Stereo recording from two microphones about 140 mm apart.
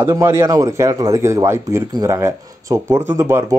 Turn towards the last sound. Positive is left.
turn(degrees=-15)  # may be behind; listen again after turning